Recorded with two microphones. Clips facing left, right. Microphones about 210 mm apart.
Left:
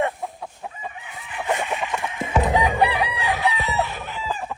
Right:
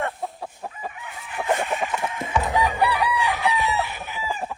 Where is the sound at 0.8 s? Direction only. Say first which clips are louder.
Right 1 dB; 45° right (ahead or behind).